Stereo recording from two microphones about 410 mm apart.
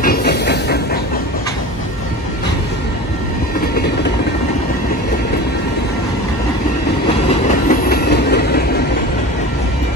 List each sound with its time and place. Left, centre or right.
0.0 s train: left
7.6 s train: left